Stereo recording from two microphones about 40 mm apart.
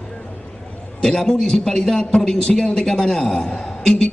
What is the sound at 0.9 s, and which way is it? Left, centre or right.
A man's voice, centre.